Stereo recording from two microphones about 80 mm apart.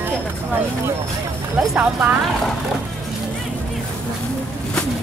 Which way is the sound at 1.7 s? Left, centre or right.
Centre.